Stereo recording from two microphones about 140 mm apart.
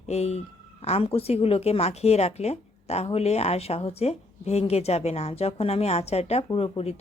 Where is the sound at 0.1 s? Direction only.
50° left (ahead or behind).